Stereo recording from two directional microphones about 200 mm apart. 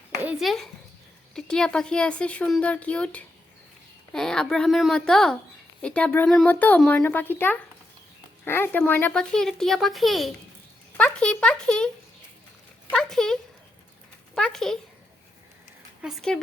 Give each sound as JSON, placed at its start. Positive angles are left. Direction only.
{"t": 0.2, "sound": "a sound", "side_deg": -5}
{"t": 1.3, "sound": "speech", "side_deg": 5}
{"t": 12.9, "sound": "speech", "side_deg": 0}
{"t": 16.0, "sound": "speech", "side_deg": 0}